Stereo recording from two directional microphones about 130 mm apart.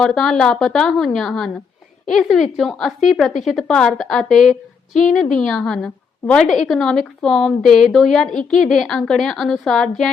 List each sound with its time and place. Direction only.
0.0 s a woman's voice: 5° left (ahead or behind)